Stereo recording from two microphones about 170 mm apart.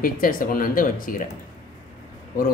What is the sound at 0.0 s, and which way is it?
Speech, 55° left (ahead or behind).